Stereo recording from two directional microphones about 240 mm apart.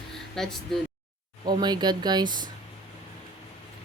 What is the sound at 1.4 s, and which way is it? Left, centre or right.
Speech, centre.